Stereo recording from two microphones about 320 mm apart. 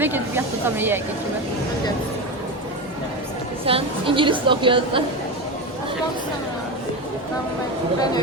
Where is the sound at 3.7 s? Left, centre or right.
Centre.